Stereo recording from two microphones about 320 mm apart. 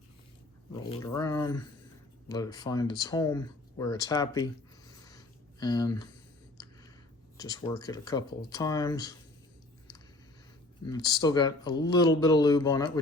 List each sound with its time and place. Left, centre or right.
0.7 s speech: centre
5.0 s a sound: centre
7.3 s speech: centre
10.8 s speech: centre